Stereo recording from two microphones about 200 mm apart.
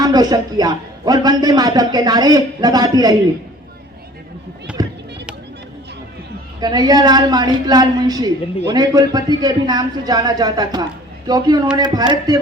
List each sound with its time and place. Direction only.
0.0 s a man's voice: 20° right (ahead or behind)
4.8 s chop: 20° right (ahead or behind)
6.6 s a man's voice: 20° right (ahead or behind)